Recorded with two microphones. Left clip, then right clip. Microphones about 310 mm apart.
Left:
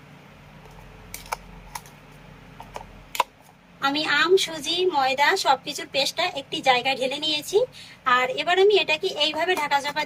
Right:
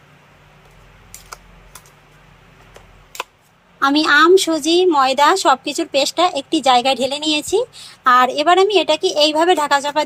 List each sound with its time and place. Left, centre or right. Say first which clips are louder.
3.8 s a woman's voice: right 9 dB; centre